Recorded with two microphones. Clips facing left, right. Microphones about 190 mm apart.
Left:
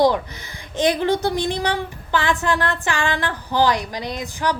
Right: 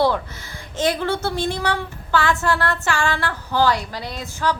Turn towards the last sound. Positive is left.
turn(degrees=15)  # may be behind; listen again after turning